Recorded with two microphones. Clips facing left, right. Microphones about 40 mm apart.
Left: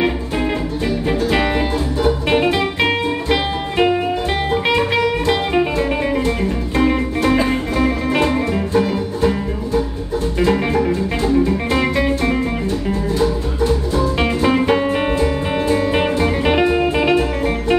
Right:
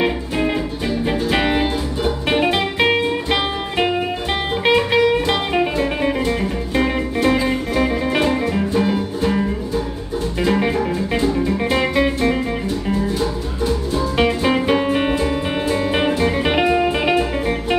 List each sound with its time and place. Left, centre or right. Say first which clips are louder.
0.0 s music: even; centre
8.8 s music: left 1 dB; centre
10.4 s music: left 2 dB; centre
14.1 s music: right 1 dB; centre